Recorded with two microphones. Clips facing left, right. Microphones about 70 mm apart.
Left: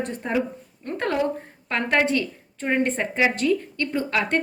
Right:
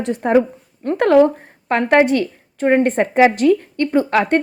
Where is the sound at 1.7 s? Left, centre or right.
Right.